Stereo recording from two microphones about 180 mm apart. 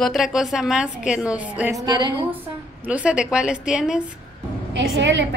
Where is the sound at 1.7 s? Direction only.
25° right (ahead or behind).